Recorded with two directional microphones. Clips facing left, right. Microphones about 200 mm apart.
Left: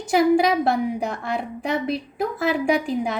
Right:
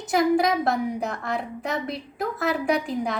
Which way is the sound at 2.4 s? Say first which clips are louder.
Left 3 dB; 30° left (ahead or behind).